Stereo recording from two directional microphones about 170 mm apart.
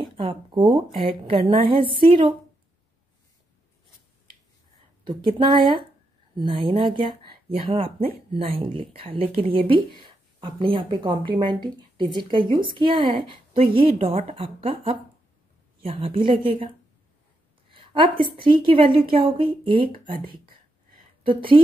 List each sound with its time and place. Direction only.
0.0 s a woman's voice: 30° right (ahead or behind)
5.0 s a woman's voice: 30° right (ahead or behind)
17.6 s a sound: 30° right (ahead or behind)
18.2 s a woman's voice: 30° right (ahead or behind)